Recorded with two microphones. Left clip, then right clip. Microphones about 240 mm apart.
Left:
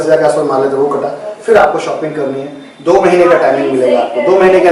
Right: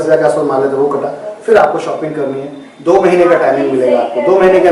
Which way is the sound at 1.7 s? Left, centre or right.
Centre.